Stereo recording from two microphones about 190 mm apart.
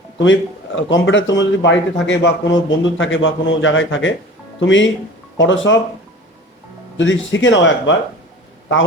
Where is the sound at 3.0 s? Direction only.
90° left.